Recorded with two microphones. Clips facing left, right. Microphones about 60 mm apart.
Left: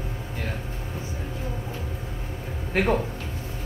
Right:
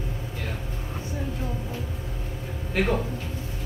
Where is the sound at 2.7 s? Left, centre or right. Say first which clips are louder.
Left 2 dB; left.